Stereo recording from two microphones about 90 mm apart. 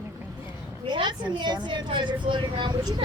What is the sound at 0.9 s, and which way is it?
Speech, 60° right (ahead or behind).